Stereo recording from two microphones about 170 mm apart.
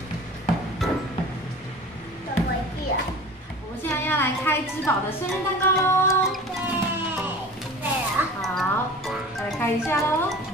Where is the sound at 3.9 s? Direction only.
15° left (ahead or behind).